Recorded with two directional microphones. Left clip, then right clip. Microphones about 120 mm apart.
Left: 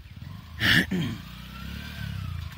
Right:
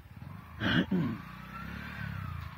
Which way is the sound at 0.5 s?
30° left (ahead or behind).